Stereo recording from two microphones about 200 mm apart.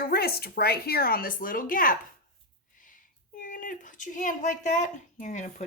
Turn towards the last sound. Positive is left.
turn(degrees=35)  # may be behind; listen again after turning